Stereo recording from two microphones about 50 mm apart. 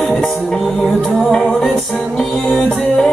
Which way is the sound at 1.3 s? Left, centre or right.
Centre.